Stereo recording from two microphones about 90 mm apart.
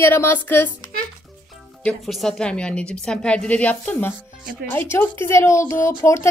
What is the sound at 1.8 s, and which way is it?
A woman's voice, 5° left (ahead or behind).